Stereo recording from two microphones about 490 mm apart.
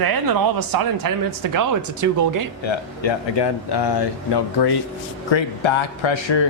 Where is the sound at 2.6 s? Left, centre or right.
Left.